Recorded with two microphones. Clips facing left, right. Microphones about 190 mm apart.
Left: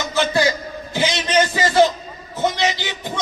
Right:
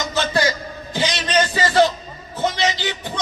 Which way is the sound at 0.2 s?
15° left (ahead or behind).